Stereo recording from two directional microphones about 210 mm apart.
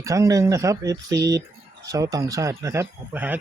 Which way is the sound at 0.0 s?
15° right (ahead or behind).